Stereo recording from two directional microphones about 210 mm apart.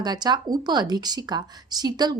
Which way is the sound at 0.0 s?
20° right (ahead or behind).